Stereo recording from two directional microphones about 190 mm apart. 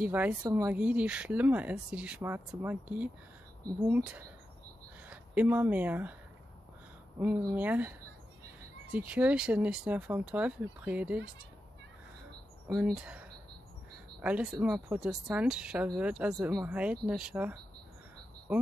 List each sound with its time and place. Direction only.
0.0 s speech: 10° right (ahead or behind)
7.2 s speech: 10° right (ahead or behind)
8.9 s speech: 5° right (ahead or behind)
12.9 s speech: 5° right (ahead or behind)